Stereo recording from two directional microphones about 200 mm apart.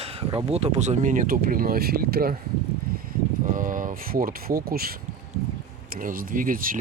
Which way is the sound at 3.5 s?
40° right (ahead or behind).